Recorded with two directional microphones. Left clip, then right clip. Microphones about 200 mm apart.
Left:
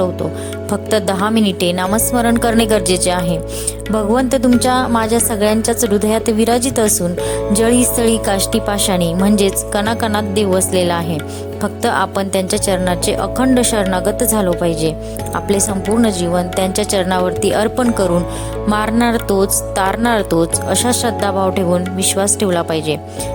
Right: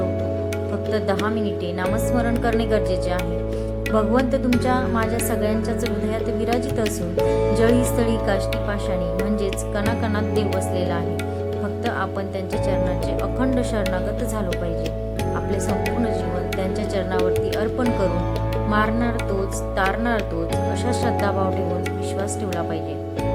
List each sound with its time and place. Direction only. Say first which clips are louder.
0.9 s speech: left 8 dB; 50° left (ahead or behind)
16.6 s speech: left 8 dB; 50° left (ahead or behind)